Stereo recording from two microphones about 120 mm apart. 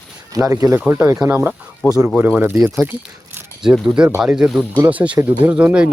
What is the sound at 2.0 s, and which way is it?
Speech, 10° right (ahead or behind).